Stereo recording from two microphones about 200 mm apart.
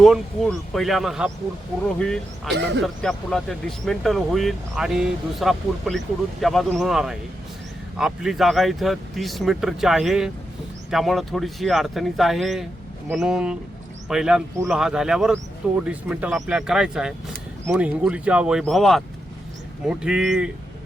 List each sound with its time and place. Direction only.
0.0 s speech: centre (ahead or behind)